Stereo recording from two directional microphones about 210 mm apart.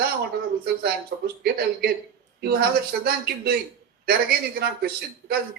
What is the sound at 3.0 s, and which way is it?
A man's voice, 50° right (ahead or behind).